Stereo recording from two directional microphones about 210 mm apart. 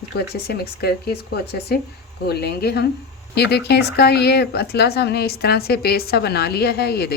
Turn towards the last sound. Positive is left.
turn(degrees=50)  # may be behind; listen again after turning